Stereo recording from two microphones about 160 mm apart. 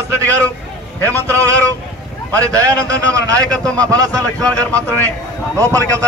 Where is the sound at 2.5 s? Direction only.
20° right (ahead or behind).